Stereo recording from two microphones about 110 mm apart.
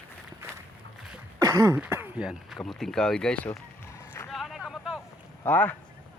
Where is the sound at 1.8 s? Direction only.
15° right (ahead or behind); by 3.3 s 5° left (ahead or behind).